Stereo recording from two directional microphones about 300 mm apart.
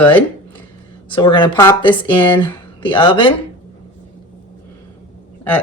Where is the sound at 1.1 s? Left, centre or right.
Centre.